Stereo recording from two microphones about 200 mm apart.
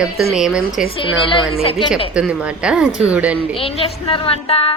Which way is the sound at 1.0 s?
25° left (ahead or behind).